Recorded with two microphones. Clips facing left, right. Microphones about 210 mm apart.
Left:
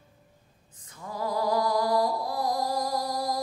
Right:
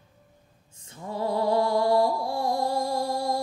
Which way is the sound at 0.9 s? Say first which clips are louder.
Right 3 dB; 25° right (ahead or behind).